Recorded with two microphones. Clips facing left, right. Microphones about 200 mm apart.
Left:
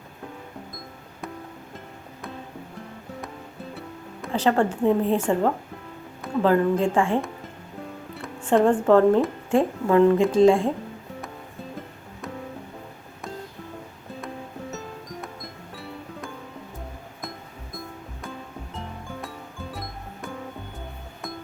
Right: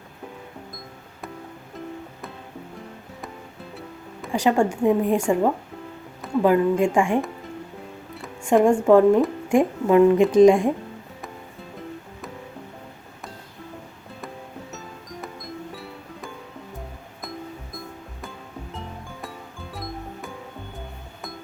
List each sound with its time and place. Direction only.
4.3 s speech: 10° right (ahead or behind)
6.4 s speech: 10° right (ahead or behind)
8.4 s speech: 10° right (ahead or behind)
15.7 s music: centre (ahead or behind)
18.7 s music: centre (ahead or behind)